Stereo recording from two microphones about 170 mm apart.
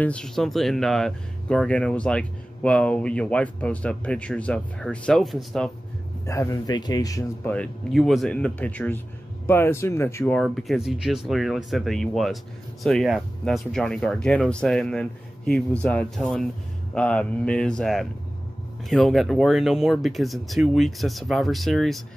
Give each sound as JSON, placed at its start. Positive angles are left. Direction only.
{"t": 0.0, "sound": "speech", "side_deg": 5}
{"t": 6.2, "sound": "speech", "side_deg": 20}
{"t": 7.5, "sound": "speech", "side_deg": 5}
{"t": 10.3, "sound": "speech", "side_deg": 0}